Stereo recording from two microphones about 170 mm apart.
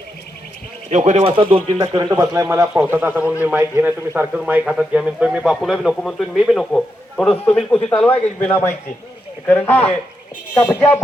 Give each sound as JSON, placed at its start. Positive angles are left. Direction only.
{"t": 0.9, "sound": "speech", "side_deg": -45}
{"t": 1.2, "sound": "speech", "side_deg": -30}
{"t": 2.1, "sound": "a man's voice", "side_deg": -15}